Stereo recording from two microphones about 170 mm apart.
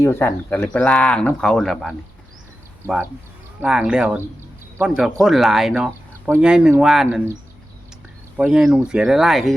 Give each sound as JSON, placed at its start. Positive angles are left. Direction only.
{"t": 0.0, "sound": "speech", "side_deg": 10}
{"t": 3.6, "sound": "speech", "side_deg": -5}
{"t": 8.4, "sound": "speech", "side_deg": -5}